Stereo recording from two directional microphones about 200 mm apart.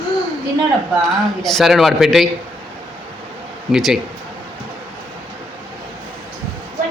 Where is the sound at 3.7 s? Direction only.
Centre (ahead or behind).